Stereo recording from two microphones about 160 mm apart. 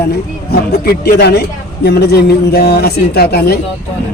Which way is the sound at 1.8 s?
90° left.